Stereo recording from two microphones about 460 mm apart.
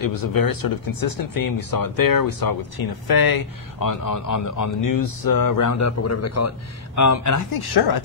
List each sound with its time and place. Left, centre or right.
0.0 s speech: left
7.6 s speech: left